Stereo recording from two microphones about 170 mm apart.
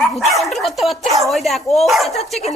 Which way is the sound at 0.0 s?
Centre (ahead or behind).